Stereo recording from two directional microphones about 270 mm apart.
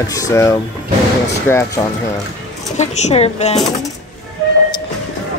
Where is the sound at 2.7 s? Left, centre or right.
Left.